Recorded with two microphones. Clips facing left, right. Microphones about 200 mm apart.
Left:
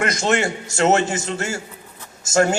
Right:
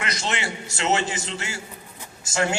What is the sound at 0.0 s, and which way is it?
A man's voice, 50° left (ahead or behind).